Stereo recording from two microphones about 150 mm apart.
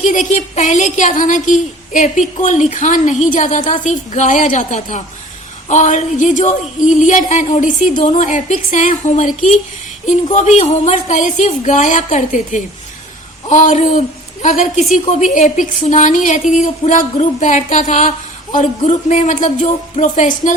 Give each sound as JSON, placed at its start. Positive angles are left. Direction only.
{"t": 0.0, "sound": "speech", "side_deg": 55}
{"t": 13.5, "sound": "a sound", "side_deg": 55}
{"t": 14.9, "sound": "speech", "side_deg": 55}